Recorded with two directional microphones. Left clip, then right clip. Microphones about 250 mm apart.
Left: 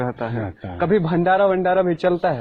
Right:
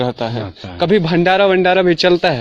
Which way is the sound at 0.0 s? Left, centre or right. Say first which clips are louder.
Right 6 dB; right.